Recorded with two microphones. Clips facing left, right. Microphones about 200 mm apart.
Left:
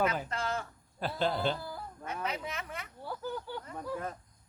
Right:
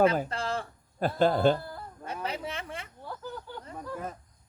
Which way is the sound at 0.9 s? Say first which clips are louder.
Right 7 dB; 45° right (ahead or behind).